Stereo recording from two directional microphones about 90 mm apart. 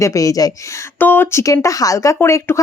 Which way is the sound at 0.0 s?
35° left (ahead or behind).